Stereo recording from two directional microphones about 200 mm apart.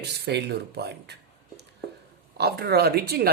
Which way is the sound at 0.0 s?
55° right (ahead or behind).